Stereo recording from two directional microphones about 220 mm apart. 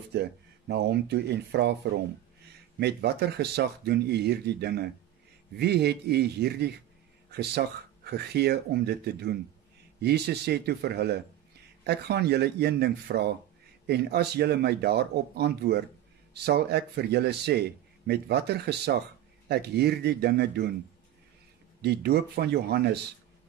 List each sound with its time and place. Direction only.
0.1 s speech: 50° right (ahead or behind)
2.8 s speech: 50° right (ahead or behind)
21.8 s speech: 45° right (ahead or behind)